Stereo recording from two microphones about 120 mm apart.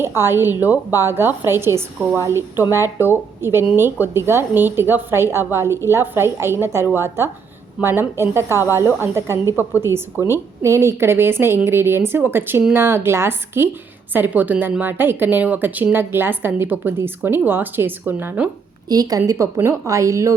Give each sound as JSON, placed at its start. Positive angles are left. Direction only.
{"t": 0.0, "sound": "a woman's voice", "side_deg": -20}
{"t": 10.2, "sound": "a woman's voice", "side_deg": 25}
{"t": 10.6, "sound": "a woman's voice", "side_deg": -25}
{"t": 18.9, "sound": "a woman's voice", "side_deg": -30}